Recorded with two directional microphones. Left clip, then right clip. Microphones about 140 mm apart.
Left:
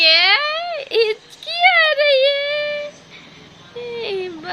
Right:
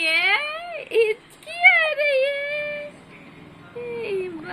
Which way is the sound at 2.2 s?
20° left (ahead or behind).